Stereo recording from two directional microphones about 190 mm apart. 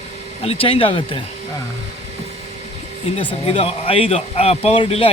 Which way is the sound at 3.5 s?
30° left (ahead or behind).